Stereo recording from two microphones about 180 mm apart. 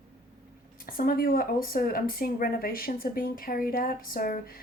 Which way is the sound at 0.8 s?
55° left (ahead or behind).